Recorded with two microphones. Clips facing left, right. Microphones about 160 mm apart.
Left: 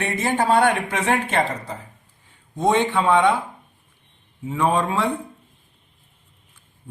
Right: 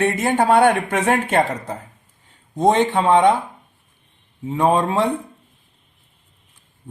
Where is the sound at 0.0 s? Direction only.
55° right (ahead or behind).